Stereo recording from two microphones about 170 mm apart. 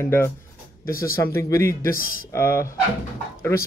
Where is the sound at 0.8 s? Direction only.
60° left (ahead or behind).